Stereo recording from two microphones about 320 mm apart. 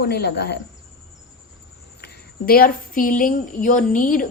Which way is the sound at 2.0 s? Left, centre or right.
Left.